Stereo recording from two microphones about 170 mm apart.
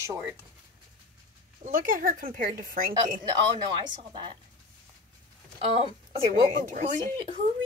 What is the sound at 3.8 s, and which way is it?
Speech, 25° right (ahead or behind).